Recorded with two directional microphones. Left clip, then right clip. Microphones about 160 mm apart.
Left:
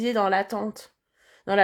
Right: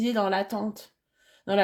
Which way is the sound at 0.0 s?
35° left (ahead or behind).